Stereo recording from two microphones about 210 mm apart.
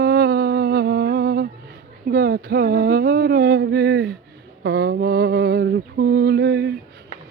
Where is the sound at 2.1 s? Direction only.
45° right (ahead or behind).